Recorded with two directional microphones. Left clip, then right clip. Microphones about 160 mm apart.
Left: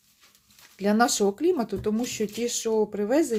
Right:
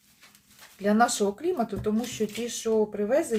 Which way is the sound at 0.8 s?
55° left (ahead or behind).